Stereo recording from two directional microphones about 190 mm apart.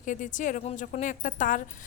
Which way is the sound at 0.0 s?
40° left (ahead or behind).